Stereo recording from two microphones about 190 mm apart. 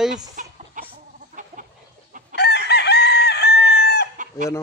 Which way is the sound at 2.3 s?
60° left (ahead or behind).